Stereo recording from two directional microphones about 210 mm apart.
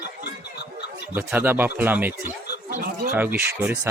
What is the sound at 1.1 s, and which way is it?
Speech, 10° right (ahead or behind).